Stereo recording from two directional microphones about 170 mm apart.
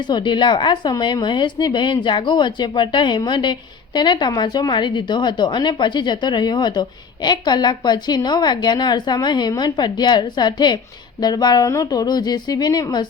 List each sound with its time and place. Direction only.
0.1 s a woman's voice: 25° left (ahead or behind)